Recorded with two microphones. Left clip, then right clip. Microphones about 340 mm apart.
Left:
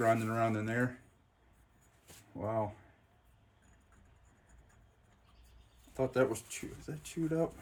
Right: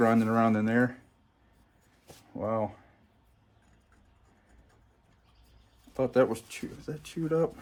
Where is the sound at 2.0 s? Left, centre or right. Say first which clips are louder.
Right 6 dB; right.